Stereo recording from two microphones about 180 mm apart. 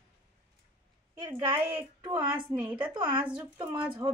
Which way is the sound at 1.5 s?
10° right (ahead or behind).